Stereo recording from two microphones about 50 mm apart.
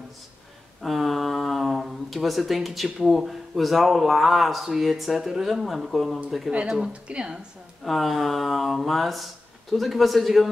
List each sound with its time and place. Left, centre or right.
0.8 s speech: centre
6.9 s speech: right
7.8 s speech: centre